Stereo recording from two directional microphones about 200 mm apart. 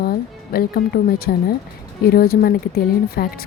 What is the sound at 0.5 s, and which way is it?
Speech, 50° left (ahead or behind).